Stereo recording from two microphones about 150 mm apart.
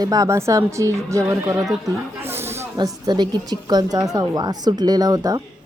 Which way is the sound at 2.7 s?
30° right (ahead or behind).